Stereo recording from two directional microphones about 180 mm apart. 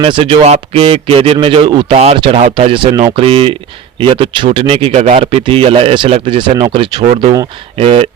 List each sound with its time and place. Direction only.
0.0 s speech: 30° right (ahead or behind)